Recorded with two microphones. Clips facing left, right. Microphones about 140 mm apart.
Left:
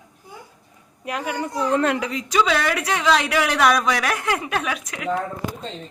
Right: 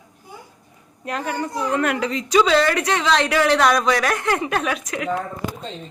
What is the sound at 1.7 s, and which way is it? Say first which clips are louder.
Speech: left 2 dB; 25° left (ahead or behind).